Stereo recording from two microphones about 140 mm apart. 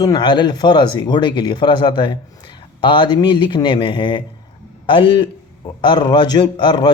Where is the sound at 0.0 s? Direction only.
30° left (ahead or behind).